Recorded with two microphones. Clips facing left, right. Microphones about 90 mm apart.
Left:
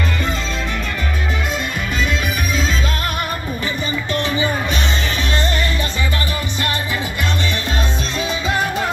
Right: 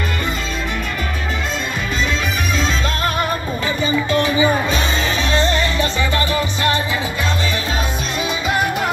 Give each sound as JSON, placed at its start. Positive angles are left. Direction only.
{"t": 3.8, "sound": "music", "side_deg": -15}